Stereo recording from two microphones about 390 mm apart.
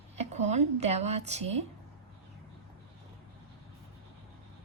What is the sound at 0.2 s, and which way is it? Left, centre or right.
A woman's voice, centre.